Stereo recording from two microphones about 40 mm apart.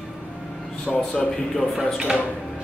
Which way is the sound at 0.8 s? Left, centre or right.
Left.